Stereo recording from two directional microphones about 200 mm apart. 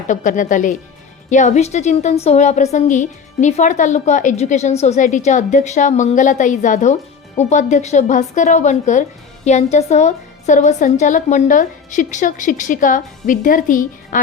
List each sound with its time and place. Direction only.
0.1 s a woman's voice: 40° left (ahead or behind)